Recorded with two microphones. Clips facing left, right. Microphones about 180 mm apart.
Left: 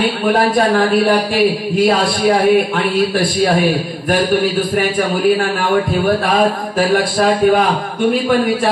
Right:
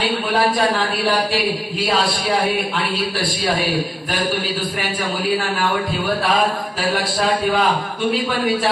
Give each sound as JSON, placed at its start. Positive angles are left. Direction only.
{"t": 0.3, "sound": "a man's voice", "side_deg": 50}
{"t": 6.8, "sound": "a man's voice", "side_deg": 45}